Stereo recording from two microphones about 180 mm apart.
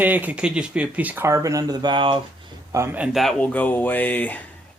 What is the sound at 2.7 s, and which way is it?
Speech, 15° right (ahead or behind).